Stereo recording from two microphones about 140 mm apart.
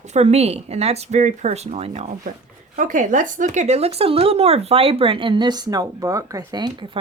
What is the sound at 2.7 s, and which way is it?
A woman's voice, 65° right (ahead or behind).